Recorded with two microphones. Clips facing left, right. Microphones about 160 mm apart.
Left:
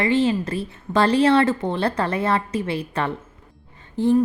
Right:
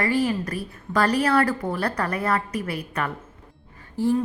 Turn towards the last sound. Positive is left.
turn(degrees=20)  # may be behind; listen again after turning